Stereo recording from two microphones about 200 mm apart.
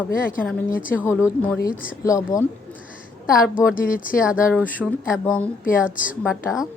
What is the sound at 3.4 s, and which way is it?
Speech, 5° right (ahead or behind).